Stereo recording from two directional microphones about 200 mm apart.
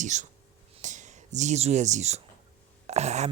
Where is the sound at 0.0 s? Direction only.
35° right (ahead or behind).